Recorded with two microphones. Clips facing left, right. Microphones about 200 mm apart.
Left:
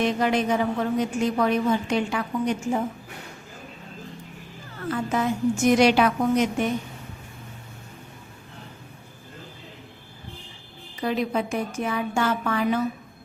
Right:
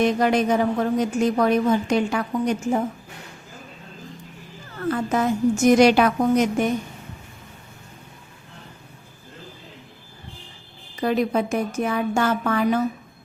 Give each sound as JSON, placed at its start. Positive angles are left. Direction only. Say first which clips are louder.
{"t": 0.0, "sound": "a woman's voice", "louder": "right 3 dB", "side_deg": -45}
{"t": 4.9, "sound": "a woman's voice", "louder": "right 3 dB", "side_deg": -45}
{"t": 11.0, "sound": "a woman's voice", "louder": "right 4 dB", "side_deg": -45}